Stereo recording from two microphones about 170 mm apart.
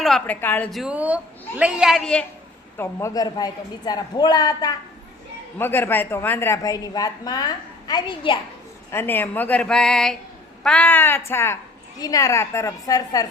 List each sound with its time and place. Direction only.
0.0 s a woman's voice: 5° left (ahead or behind)
2.7 s a woman's voice: 15° left (ahead or behind)
8.9 s a woman's voice: 15° left (ahead or behind)